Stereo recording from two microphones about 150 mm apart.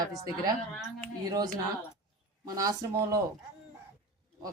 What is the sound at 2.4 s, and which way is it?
Speech, 25° right (ahead or behind).